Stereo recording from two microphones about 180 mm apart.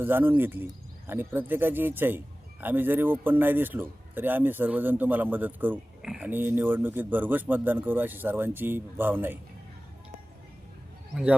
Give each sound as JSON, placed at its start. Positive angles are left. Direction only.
{"t": 0.0, "sound": "speech", "side_deg": -10}
{"t": 11.1, "sound": "speech", "side_deg": -5}